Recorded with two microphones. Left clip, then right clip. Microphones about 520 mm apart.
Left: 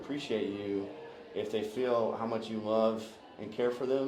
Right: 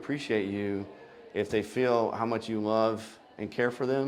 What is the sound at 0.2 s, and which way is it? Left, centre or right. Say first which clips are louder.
Speech: right 3 dB; right.